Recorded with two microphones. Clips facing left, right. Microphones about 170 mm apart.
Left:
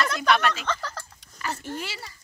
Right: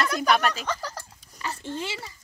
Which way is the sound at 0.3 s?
35° right (ahead or behind).